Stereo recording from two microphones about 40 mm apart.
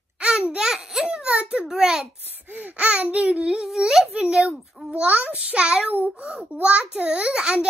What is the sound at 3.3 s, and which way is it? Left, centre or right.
Speech, right.